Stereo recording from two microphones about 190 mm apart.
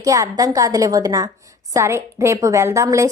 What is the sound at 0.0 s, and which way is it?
A woman's voice, 15° right (ahead or behind).